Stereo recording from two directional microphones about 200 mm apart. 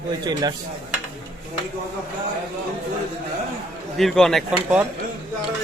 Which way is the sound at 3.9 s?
Centre (ahead or behind).